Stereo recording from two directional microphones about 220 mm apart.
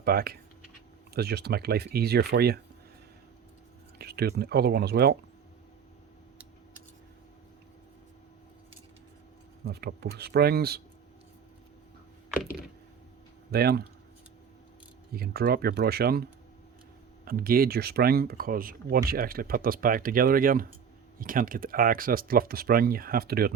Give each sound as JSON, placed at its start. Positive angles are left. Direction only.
{"t": 0.0, "sound": "speech", "side_deg": -45}
{"t": 3.9, "sound": "speech", "side_deg": -45}
{"t": 9.6, "sound": "speech", "side_deg": -45}
{"t": 13.5, "sound": "speech", "side_deg": -45}
{"t": 15.1, "sound": "speech", "side_deg": -45}